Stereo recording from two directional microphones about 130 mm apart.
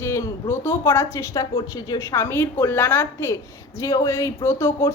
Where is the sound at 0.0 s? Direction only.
20° left (ahead or behind).